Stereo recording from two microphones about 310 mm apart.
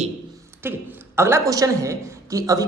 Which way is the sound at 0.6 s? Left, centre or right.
Centre.